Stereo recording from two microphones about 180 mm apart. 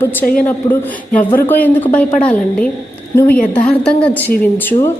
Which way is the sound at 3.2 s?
50° left (ahead or behind).